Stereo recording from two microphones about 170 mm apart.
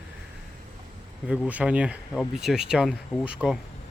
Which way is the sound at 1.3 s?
5° right (ahead or behind).